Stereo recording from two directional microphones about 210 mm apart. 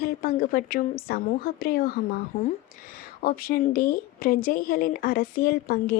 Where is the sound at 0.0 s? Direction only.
45° left (ahead or behind).